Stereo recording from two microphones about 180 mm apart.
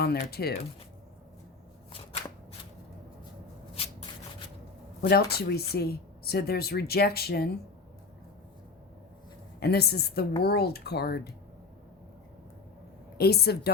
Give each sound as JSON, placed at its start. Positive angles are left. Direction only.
{"t": 0.0, "sound": "speech", "side_deg": 60}
{"t": 5.0, "sound": "speech", "side_deg": 60}
{"t": 9.6, "sound": "speech", "side_deg": 60}
{"t": 13.1, "sound": "speech", "side_deg": 60}